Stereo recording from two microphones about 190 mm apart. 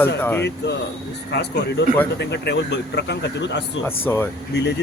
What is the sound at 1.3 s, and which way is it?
Speech, 65° left (ahead or behind).